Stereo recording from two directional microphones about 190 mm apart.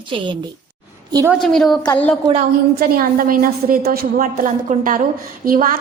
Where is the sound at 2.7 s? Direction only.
50° right (ahead or behind).